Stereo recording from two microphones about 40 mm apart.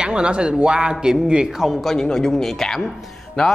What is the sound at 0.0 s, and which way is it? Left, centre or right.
A man's voice, right.